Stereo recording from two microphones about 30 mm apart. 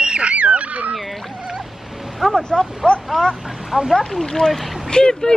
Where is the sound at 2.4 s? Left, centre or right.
Left.